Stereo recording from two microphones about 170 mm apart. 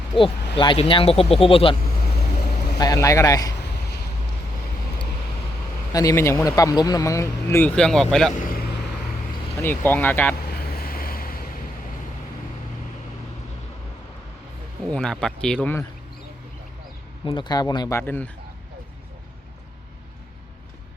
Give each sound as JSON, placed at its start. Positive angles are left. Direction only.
{"t": 0.5, "sound": "speech", "side_deg": 30}
{"t": 2.0, "sound": "vehicle", "side_deg": 60}
{"t": 2.7, "sound": "speech", "side_deg": 20}
{"t": 3.8, "sound": "vehicle", "side_deg": 75}
{"t": 5.9, "sound": "speech", "side_deg": 20}
{"t": 8.3, "sound": "vehicle", "side_deg": 55}
{"t": 9.6, "sound": "speech", "side_deg": 10}
{"t": 10.8, "sound": "waves", "side_deg": 60}
{"t": 14.9, "sound": "speech", "side_deg": 5}
{"t": 17.2, "sound": "speech", "side_deg": 30}